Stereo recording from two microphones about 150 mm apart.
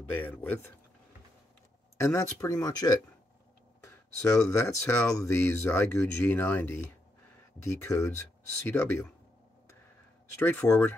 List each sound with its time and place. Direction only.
0.2 s speech: 10° left (ahead or behind)
2.0 s speech: 20° left (ahead or behind)
10.3 s speech: 15° left (ahead or behind)